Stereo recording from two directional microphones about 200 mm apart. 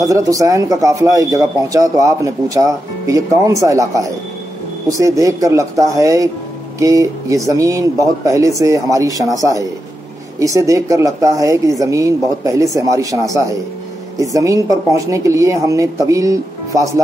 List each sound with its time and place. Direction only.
0.0 s speech: 15° right (ahead or behind)